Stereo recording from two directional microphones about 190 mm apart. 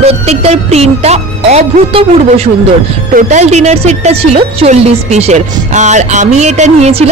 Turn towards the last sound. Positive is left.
turn(degrees=-35)  # may be behind; listen again after turning